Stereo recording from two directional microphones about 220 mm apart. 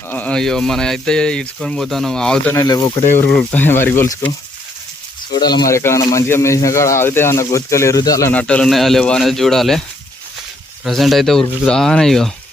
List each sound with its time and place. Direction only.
0.1 s speech: 5° left (ahead or behind)
2.6 s speech: 15° left (ahead or behind)
3.2 s speech: 5° left (ahead or behind)
5.4 s speech: 20° left (ahead or behind); by 9.8 s centre (ahead or behind)
10.8 s speech: centre (ahead or behind)